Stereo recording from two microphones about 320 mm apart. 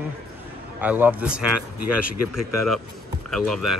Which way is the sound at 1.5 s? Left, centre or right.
Left.